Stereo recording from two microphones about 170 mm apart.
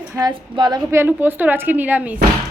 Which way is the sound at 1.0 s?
10° right (ahead or behind).